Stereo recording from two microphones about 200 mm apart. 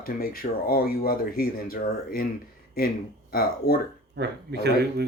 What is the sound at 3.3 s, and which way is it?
Speech, 50° left (ahead or behind).